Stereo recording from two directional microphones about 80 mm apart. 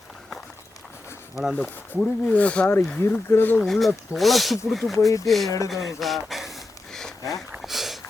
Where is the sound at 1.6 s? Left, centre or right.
Centre.